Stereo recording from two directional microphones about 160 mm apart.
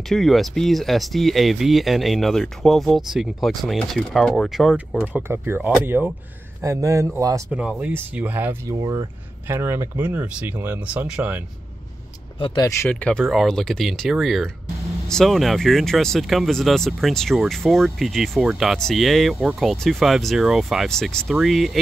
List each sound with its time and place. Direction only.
0.1 s a man's voice: centre (ahead or behind); by 7.4 s 20° right (ahead or behind)
7.5 s speech: 10° right (ahead or behind)
8.7 s a man's voice: 25° right (ahead or behind); by 11.4 s 10° right (ahead or behind)
12.4 s speech: 30° left (ahead or behind)
12.9 s speech: centre (ahead or behind)